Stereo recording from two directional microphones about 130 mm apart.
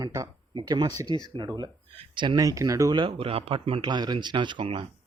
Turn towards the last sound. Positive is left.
turn(degrees=-40)  # may be behind; listen again after turning